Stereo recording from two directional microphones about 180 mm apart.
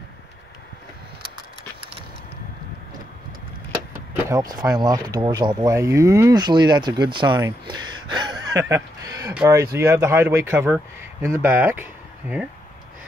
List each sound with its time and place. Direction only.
4.6 s speech: 20° right (ahead or behind)